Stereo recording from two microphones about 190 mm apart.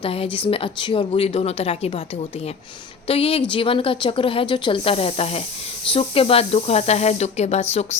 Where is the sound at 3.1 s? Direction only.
30° left (ahead or behind).